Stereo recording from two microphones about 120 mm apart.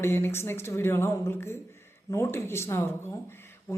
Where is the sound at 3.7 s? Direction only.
20° left (ahead or behind).